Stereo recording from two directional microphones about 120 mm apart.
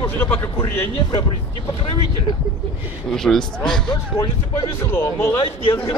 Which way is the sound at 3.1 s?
5° left (ahead or behind).